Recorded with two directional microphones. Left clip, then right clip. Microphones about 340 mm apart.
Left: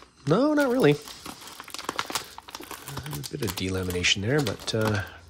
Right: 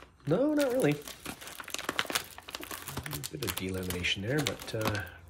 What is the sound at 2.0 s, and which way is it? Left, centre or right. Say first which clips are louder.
Crumpling: left 1 dB; centre.